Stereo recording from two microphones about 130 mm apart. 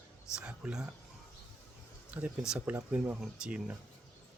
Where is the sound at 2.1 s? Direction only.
10° right (ahead or behind).